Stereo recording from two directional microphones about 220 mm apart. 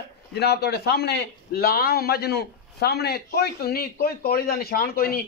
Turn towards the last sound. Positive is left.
turn(degrees=40)  # may be behind; listen again after turning